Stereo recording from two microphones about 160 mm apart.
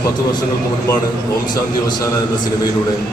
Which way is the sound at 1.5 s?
25° left (ahead or behind).